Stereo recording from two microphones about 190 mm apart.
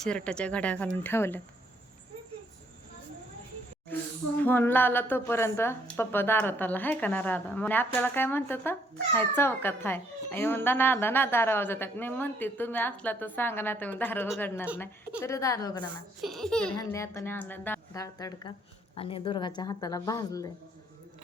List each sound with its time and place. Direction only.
0.0 s speech: 5° left (ahead or behind)
4.4 s speech: 10° left (ahead or behind)
16.2 s a child's voice: centre (ahead or behind)
16.7 s speech: 15° left (ahead or behind)
18.9 s a woman's voice: 30° left (ahead or behind)